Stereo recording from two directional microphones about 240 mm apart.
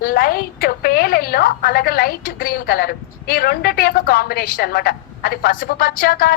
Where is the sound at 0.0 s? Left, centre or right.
Left.